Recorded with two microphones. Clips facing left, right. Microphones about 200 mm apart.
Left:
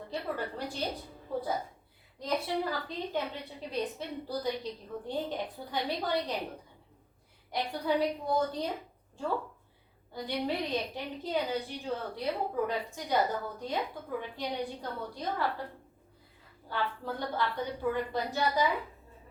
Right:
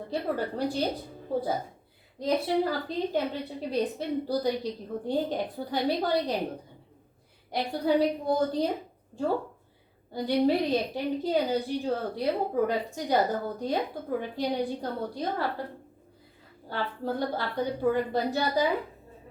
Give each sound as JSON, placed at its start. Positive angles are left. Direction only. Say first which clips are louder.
{"t": 0.1, "sound": "a woman's voice", "louder": "right 6 dB", "side_deg": -35}
{"t": 2.1, "sound": "a woman's voice", "louder": "right 6 dB", "side_deg": -35}
{"t": 7.5, "sound": "a woman's voice", "louder": "right 5 dB", "side_deg": -35}
{"t": 10.1, "sound": "a woman's voice", "louder": "right 9 dB", "side_deg": -35}
{"t": 16.6, "sound": "a woman's voice", "louder": "right 3 dB", "side_deg": -35}